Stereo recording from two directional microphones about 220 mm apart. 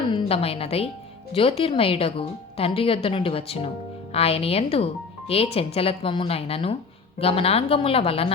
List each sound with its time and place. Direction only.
0.1 s a woman's voice: 25° left (ahead or behind)